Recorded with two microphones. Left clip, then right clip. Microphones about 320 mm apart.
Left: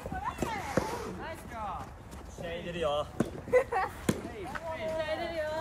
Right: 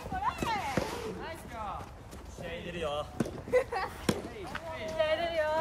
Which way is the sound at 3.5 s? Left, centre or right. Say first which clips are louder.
Left 2 dB; centre.